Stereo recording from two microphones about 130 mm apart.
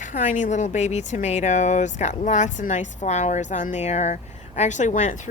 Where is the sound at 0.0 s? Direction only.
80° left.